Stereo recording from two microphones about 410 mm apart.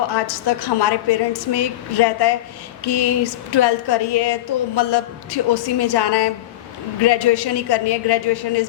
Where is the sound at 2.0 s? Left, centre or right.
Left.